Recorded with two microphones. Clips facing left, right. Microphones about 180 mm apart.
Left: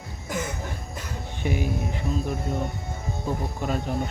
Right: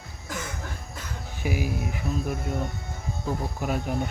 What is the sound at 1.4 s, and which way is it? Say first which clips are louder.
Speech: left 1 dB; 5° right (ahead or behind).